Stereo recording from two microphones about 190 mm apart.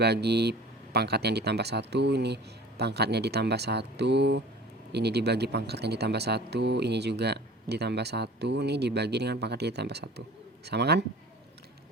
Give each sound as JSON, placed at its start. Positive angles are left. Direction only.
{"t": 0.0, "sound": "speech", "side_deg": -60}